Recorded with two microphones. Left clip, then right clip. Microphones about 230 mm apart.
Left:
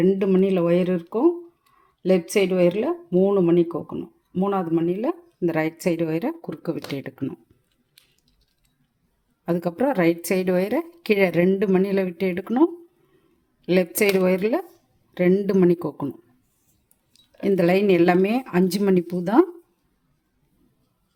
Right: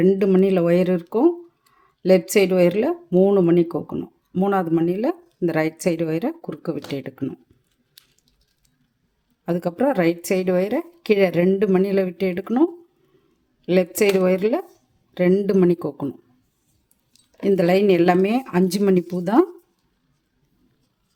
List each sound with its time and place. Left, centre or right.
0.0 s speech: centre
9.5 s a woman's voice: centre